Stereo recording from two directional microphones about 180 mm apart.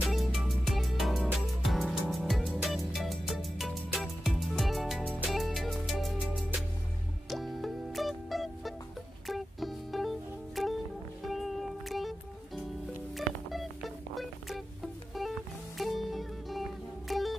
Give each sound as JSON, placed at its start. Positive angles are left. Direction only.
{"t": 0.0, "sound": "music", "side_deg": 0}
{"t": 15.8, "sound": "music", "side_deg": 0}